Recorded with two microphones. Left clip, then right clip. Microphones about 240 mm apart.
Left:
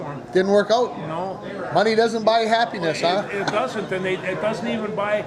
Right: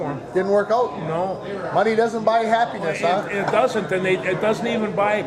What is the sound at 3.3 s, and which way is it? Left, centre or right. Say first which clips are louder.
A man's voice: right 4 dB; right.